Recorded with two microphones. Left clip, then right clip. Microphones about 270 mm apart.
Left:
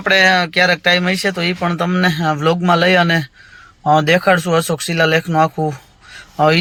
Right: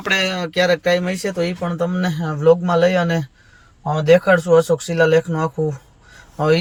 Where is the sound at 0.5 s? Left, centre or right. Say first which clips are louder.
Left 3 dB; left.